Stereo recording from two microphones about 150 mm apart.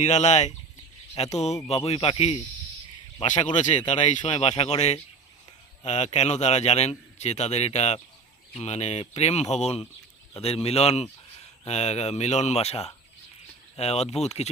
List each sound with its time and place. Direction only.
0.0 s speech: 50° left (ahead or behind)
3.2 s speech: 50° left (ahead or behind)